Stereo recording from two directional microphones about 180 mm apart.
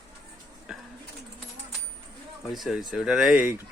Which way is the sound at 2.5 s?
Centre (ahead or behind).